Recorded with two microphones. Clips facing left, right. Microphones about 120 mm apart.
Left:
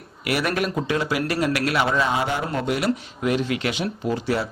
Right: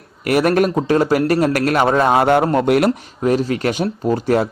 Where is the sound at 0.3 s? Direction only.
45° right (ahead or behind).